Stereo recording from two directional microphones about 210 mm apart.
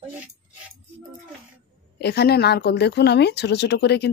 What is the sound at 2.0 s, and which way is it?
A woman's voice, 50° left (ahead or behind).